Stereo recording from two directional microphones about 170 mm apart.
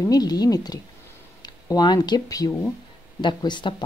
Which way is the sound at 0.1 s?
25° left (ahead or behind).